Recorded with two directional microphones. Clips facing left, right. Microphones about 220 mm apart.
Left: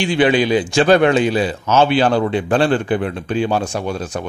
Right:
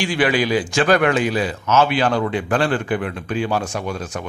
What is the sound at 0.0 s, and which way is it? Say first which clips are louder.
A man's voice: left 4 dB; 25° left (ahead or behind).